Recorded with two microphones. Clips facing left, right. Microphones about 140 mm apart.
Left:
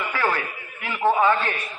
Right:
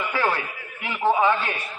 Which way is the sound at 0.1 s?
15° right (ahead or behind).